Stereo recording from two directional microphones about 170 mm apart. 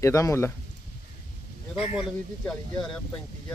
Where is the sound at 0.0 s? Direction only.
20° left (ahead or behind).